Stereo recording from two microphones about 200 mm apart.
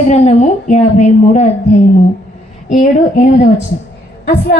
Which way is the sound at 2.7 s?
35° left (ahead or behind).